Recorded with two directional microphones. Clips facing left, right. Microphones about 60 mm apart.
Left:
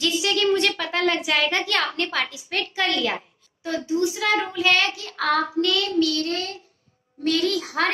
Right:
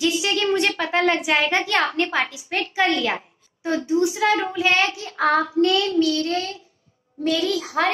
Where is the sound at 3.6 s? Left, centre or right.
Right.